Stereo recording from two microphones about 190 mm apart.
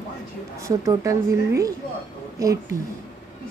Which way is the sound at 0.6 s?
15° right (ahead or behind).